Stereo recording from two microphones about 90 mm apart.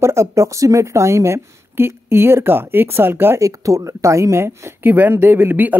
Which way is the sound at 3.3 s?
35° right (ahead or behind).